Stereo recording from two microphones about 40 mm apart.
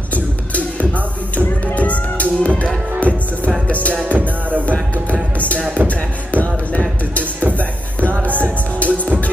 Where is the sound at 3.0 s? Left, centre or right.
Right.